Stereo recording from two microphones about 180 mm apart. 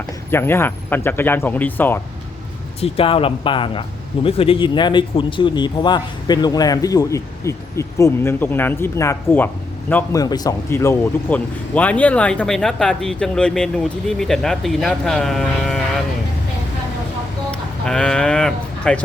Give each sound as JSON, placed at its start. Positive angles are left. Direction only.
{"t": 0.3, "sound": "speech", "side_deg": 15}
{"t": 2.8, "sound": "speech", "side_deg": 30}
{"t": 17.8, "sound": "speech", "side_deg": 5}